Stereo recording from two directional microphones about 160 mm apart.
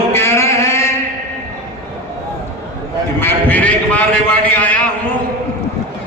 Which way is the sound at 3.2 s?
10° left (ahead or behind).